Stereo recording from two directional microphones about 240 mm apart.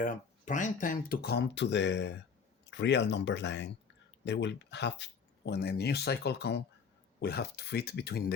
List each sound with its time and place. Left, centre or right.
0.0 s speech: left